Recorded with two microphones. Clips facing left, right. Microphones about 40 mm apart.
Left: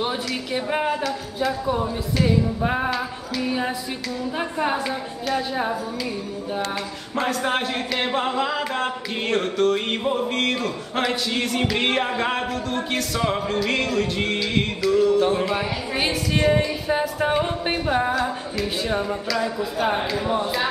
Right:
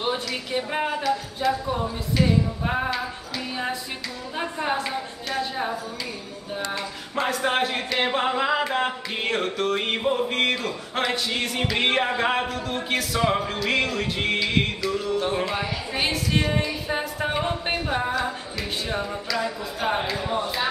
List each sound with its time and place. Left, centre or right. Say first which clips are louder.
0.3 s a capella: left 2 dB; centre
7.2 s a capella: even; centre